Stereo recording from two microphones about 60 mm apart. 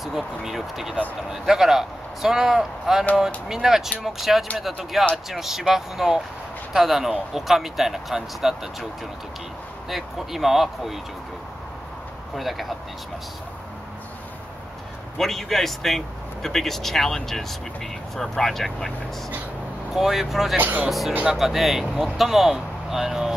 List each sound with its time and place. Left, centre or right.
0.0 s speech: centre
9.8 s speech: centre
12.4 s speech: centre
15.1 s speech: centre
20.5 s speech: right
21.4 s speech: centre